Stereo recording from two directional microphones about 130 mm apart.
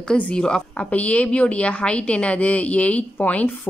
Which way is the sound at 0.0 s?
5° left (ahead or behind).